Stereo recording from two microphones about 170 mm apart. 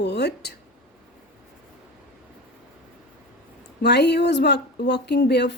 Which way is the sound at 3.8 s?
80° left.